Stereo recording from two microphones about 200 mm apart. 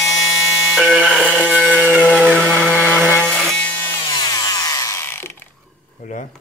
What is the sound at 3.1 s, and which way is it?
Wood, 5° left (ahead or behind).